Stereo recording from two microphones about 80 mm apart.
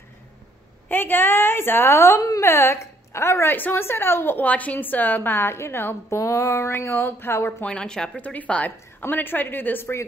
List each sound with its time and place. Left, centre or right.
0.8 s a woman's voice: left
7.6 s speech: centre
8.2 s a woman's voice: centre